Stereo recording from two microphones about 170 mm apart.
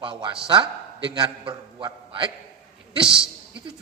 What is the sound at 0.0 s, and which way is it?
A man's voice, 30° right (ahead or behind).